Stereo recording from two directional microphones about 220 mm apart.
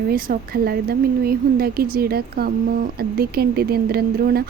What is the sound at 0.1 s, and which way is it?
A woman's voice, 40° right (ahead or behind).